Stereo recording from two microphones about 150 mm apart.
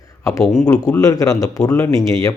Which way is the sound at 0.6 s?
25° left (ahead or behind).